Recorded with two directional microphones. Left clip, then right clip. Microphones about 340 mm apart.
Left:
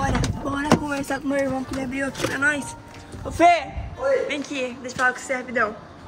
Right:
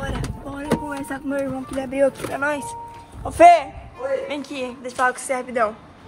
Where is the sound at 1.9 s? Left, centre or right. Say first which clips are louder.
Right 9 dB; centre.